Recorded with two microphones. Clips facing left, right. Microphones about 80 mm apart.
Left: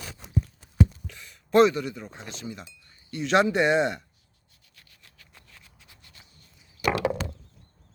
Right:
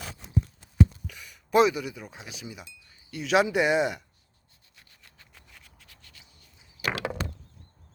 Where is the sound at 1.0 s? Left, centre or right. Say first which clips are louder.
Right 1 dB; centre.